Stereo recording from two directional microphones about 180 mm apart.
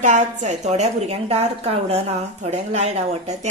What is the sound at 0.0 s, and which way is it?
Speech, 40° right (ahead or behind).